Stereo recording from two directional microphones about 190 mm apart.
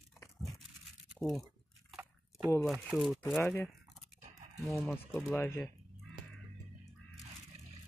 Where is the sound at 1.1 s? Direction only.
Centre (ahead or behind).